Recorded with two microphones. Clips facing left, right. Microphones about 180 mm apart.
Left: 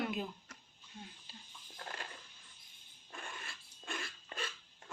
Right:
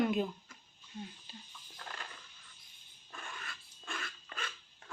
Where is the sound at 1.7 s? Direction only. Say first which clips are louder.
Left 1 dB; 25° left (ahead or behind).